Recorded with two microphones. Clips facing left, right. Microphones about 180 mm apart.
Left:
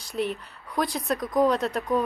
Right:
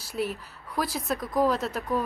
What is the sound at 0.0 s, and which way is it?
Speech, 5° right (ahead or behind).